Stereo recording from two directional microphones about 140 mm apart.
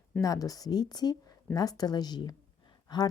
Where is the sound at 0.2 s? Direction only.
25° left (ahead or behind).